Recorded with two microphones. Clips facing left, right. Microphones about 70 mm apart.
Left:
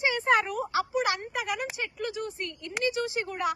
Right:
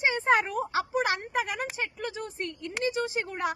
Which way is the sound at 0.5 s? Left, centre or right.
Right.